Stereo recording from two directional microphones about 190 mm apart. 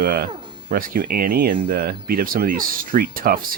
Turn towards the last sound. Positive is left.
turn(degrees=-50)  # may be behind; listen again after turning